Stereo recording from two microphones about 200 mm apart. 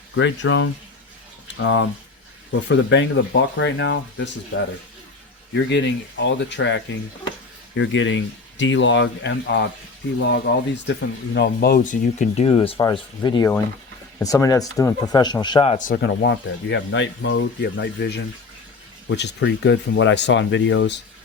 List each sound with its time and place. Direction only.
0.2 s speech: 65° left (ahead or behind)
5.6 s speech: 60° left (ahead or behind); by 15.8 s 25° left (ahead or behind)
15.9 s speech: 55° left (ahead or behind)